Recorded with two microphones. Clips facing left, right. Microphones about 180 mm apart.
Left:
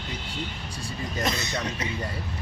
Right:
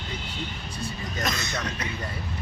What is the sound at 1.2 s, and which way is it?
Speech, 30° left (ahead or behind).